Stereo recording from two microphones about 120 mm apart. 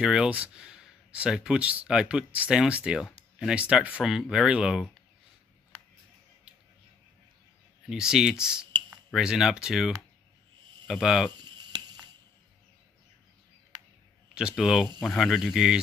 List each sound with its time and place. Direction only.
0.0 s speech: 5° right (ahead or behind)
7.9 s speech: 5° right (ahead or behind)
11.3 s a sound: 35° right (ahead or behind)
14.5 s speech: 5° right (ahead or behind)